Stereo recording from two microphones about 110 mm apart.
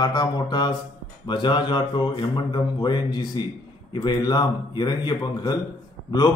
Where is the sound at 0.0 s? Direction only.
40° left (ahead or behind).